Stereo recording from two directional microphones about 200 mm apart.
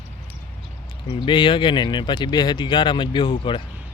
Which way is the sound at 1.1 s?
25° left (ahead or behind).